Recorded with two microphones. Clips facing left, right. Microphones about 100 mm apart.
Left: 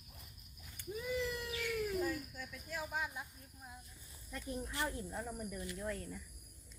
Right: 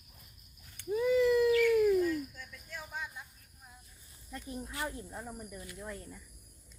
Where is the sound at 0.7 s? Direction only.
90° right.